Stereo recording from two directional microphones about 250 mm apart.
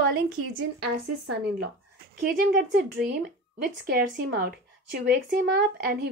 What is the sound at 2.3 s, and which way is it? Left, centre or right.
A woman's voice, right.